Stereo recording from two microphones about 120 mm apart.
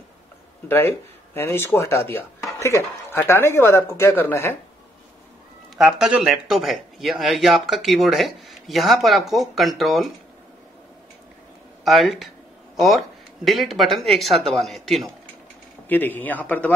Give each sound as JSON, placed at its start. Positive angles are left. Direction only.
{"t": 0.7, "sound": "speech", "side_deg": 20}
{"t": 5.8, "sound": "speech", "side_deg": -5}
{"t": 11.8, "sound": "speech", "side_deg": 0}
{"t": 15.9, "sound": "speech", "side_deg": 15}